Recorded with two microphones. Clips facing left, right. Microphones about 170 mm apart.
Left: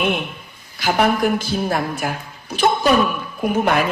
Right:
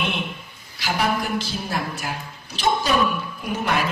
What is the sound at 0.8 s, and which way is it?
A man's voice, 55° left (ahead or behind).